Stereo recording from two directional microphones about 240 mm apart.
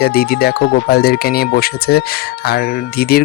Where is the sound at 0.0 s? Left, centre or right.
Left.